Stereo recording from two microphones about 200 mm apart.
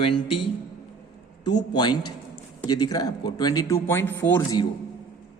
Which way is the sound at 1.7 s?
20° left (ahead or behind).